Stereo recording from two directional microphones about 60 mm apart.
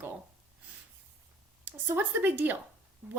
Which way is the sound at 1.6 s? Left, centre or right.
Right.